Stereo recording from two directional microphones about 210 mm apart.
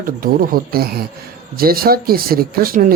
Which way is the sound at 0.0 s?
40° right (ahead or behind).